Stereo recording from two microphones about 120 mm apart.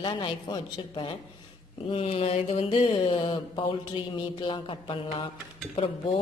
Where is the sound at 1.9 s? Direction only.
55° left (ahead or behind).